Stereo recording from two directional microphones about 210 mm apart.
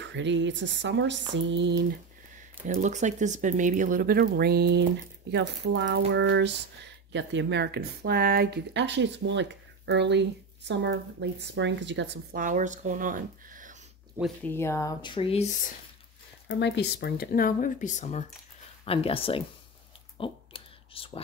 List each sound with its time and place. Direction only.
0.0 s speech: 60° right (ahead or behind)
2.6 s speech: 35° right (ahead or behind)
14.4 s speech: 10° left (ahead or behind); by 15.7 s 35° left (ahead or behind)
16.4 s speech: 55° left (ahead or behind); by 19.4 s 25° left (ahead or behind)
20.2 s computer keyboard: 25° left (ahead or behind)